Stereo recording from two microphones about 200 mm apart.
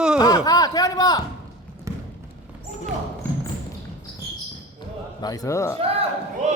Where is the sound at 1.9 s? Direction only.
15° right (ahead or behind).